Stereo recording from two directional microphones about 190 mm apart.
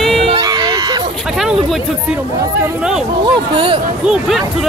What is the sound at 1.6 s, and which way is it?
Speech, centre (ahead or behind).